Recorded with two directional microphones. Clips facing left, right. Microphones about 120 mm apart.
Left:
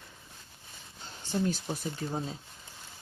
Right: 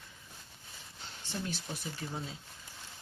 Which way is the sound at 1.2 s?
40° left (ahead or behind).